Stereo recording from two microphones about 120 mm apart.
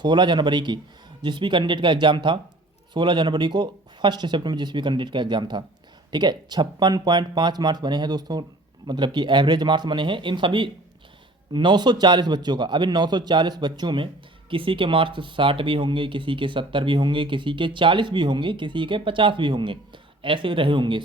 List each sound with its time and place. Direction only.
0.0 s speech: 40° right (ahead or behind)